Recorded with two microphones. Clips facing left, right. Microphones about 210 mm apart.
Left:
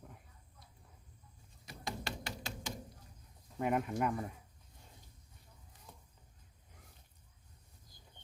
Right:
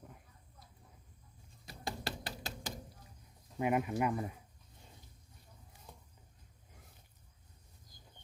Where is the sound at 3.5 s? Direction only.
5° right (ahead or behind).